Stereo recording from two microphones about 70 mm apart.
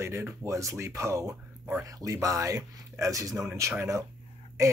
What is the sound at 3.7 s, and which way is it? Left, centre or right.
Speech, right.